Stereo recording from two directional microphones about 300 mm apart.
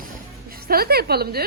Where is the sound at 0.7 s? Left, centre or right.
Right.